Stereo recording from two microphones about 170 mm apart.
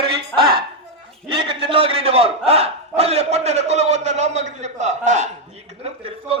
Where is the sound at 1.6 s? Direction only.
30° right (ahead or behind).